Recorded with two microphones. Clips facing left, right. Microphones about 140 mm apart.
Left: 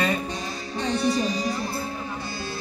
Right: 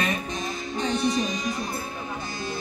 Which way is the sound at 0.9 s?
35° left (ahead or behind).